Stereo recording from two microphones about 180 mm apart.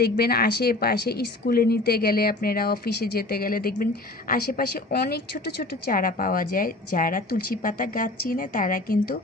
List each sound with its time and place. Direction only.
0.0 s a woman's voice: 60° left (ahead or behind)